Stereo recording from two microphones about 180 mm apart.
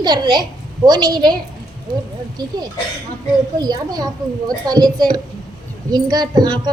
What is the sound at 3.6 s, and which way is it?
A woman's voice, 20° right (ahead or behind).